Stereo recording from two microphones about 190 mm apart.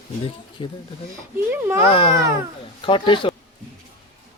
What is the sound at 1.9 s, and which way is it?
Speech, 30° left (ahead or behind).